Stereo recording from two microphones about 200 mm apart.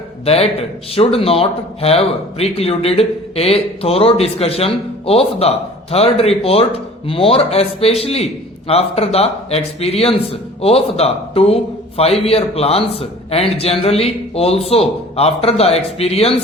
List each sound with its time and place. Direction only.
0.9 s speech: 30° left (ahead or behind)